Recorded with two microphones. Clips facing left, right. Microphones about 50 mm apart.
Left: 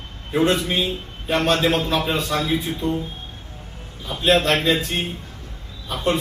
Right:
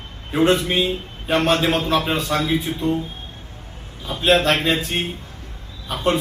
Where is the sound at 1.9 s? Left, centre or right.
Right.